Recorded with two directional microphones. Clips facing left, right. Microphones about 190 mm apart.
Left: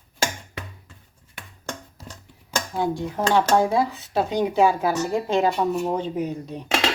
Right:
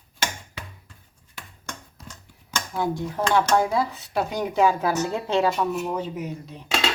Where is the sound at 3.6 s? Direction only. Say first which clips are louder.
Left 2 dB; 20° left (ahead or behind).